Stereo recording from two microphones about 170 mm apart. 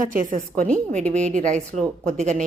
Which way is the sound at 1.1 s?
45° right (ahead or behind).